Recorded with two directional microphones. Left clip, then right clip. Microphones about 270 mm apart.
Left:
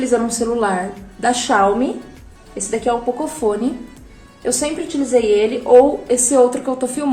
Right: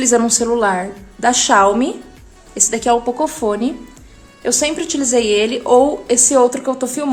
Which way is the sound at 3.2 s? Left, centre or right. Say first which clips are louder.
Right 1 dB; right.